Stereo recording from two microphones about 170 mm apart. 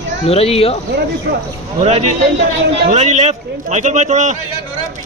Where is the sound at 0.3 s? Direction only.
35° left (ahead or behind).